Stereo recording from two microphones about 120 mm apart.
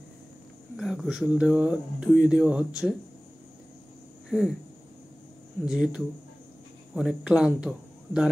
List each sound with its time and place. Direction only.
0.7 s speech: 5° right (ahead or behind)
5.7 s speech: 5° right (ahead or behind)